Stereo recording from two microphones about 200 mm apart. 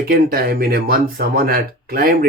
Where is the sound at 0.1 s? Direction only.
50° right (ahead or behind).